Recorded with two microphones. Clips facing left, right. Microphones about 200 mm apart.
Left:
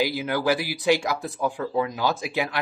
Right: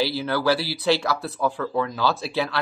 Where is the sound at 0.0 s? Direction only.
15° left (ahead or behind).